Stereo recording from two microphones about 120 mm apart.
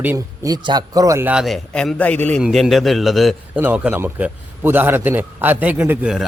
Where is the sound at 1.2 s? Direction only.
5° right (ahead or behind).